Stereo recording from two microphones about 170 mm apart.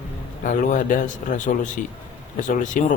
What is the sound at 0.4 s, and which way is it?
Speech, 50° left (ahead or behind).